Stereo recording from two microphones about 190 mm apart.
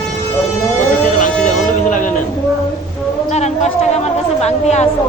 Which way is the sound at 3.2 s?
35° left (ahead or behind).